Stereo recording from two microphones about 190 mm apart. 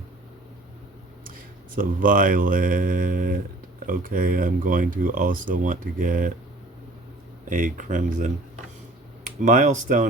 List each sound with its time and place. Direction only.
1.7 s speech: 45° right (ahead or behind)
7.4 s speech: 45° right (ahead or behind)